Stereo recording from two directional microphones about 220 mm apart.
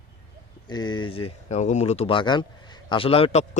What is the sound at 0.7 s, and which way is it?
Speech, 20° left (ahead or behind).